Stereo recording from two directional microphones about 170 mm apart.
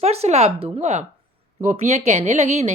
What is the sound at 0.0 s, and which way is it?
A woman's voice, 40° right (ahead or behind).